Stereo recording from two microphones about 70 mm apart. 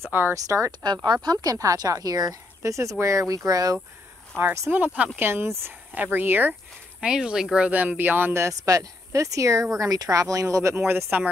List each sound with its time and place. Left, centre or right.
0.0 s speech: right
0.3 s speech: right
1.0 s speech: right
2.6 s speech: right
4.4 s speech: right
5.2 s speech: right
7.0 s speech: centre
8.4 s speech: right